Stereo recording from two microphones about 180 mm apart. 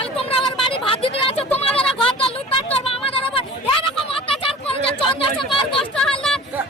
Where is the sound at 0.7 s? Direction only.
30° left (ahead or behind).